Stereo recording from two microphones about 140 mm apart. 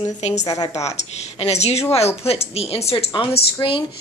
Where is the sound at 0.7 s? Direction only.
50° left (ahead or behind).